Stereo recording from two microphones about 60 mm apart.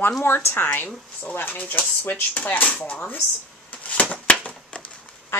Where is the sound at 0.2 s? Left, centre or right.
Left.